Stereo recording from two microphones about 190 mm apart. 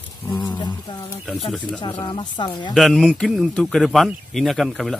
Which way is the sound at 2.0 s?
25° left (ahead or behind).